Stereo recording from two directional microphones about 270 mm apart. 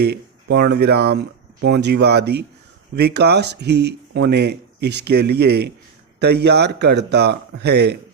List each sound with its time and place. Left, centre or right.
0.0 s speech: right